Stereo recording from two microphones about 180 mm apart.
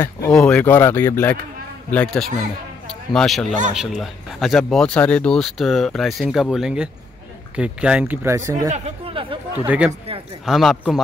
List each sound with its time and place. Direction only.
0.0 s speech: 10° left (ahead or behind); by 8.6 s 15° right (ahead or behind)
8.6 s speech: 40° right (ahead or behind)
9.7 s speech: 5° right (ahead or behind)